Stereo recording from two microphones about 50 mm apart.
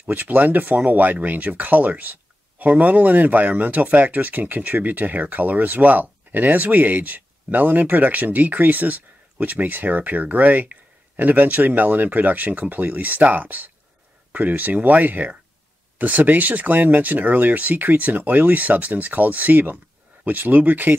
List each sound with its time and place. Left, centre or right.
0.0 s speech: right